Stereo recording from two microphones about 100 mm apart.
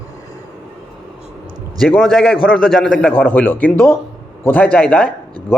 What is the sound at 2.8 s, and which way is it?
A man's voice, 15° left (ahead or behind).